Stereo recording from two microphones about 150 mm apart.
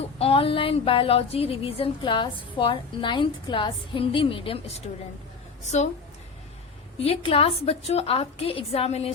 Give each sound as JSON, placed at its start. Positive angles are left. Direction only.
{"t": 0.2, "sound": "a woman's voice", "side_deg": 35}
{"t": 5.6, "sound": "a woman's voice", "side_deg": 50}
{"t": 7.0, "sound": "a woman's voice", "side_deg": 40}